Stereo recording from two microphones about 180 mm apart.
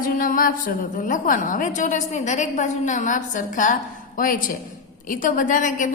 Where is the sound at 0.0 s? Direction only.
50° left (ahead or behind).